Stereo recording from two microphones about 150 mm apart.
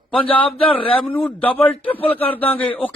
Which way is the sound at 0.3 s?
10° left (ahead or behind).